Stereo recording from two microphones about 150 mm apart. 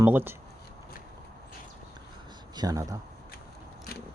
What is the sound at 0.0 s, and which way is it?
Speech, 15° right (ahead or behind).